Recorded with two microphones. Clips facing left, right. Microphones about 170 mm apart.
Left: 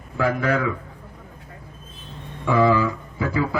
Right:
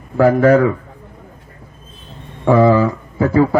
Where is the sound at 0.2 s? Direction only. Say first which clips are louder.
Right 11 dB; 45° right (ahead or behind).